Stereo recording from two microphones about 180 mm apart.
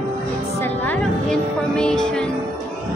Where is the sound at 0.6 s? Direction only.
10° left (ahead or behind).